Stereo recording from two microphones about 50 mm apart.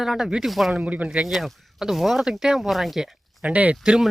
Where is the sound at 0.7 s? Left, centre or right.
Right.